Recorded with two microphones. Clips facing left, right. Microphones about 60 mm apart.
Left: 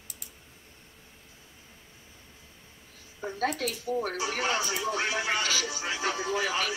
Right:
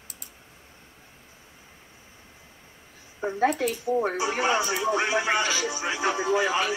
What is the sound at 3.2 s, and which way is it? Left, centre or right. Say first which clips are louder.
Speech: right 6 dB; right.